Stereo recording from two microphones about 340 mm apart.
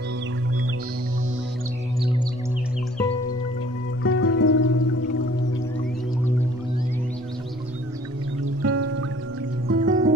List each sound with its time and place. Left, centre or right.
4.0 s music: left
8.6 s music: right